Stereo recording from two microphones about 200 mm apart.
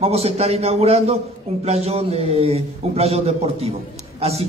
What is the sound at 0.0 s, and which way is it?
A man's voice, 30° right (ahead or behind).